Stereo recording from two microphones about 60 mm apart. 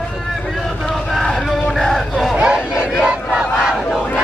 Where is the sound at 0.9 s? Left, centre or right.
Centre.